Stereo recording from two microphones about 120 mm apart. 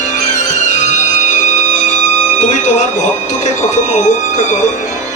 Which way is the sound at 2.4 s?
90° left.